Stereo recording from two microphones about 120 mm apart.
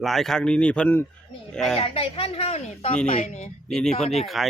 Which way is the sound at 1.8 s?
50° left (ahead or behind).